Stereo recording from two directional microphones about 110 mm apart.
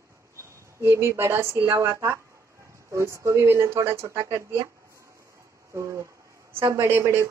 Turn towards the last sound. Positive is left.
turn(degrees=-25)  # may be behind; listen again after turning